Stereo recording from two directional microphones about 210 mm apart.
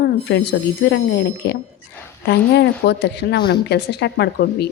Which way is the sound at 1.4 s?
50° left (ahead or behind).